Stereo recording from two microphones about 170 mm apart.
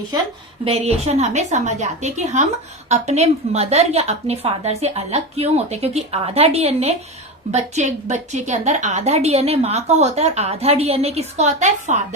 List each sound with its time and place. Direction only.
0.6 s a woman's voice: 35° right (ahead or behind)